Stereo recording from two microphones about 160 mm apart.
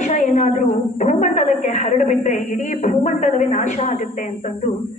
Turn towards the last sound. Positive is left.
turn(degrees=55)  # may be behind; listen again after turning